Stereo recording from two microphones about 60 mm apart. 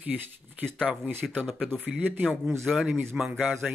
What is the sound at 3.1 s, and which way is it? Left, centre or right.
Speech, centre.